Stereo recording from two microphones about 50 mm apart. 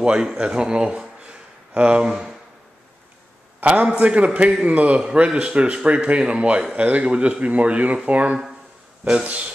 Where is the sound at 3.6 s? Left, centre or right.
Right.